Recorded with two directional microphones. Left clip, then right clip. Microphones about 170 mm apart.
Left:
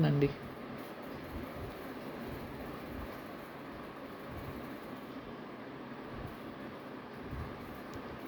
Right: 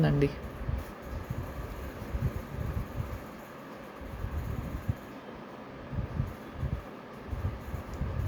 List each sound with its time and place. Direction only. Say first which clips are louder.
0.0 s speech: right 3 dB; 15° right (ahead or behind)